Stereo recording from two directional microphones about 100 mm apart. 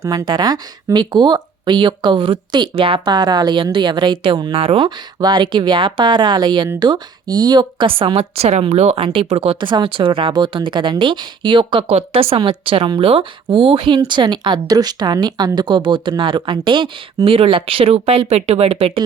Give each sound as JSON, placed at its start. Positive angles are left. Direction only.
{"t": 0.0, "sound": "a woman's voice", "side_deg": -35}
{"t": 4.5, "sound": "speech", "side_deg": -70}
{"t": 5.2, "sound": "a woman's voice", "side_deg": -50}
{"t": 9.6, "sound": "a woman's voice", "side_deg": -50}
{"t": 11.9, "sound": "speech", "side_deg": -80}
{"t": 12.4, "sound": "a woman's voice", "side_deg": -60}
{"t": 18.3, "sound": "speech", "side_deg": -90}